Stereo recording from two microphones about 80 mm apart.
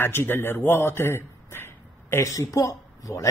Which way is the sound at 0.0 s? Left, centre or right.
Left.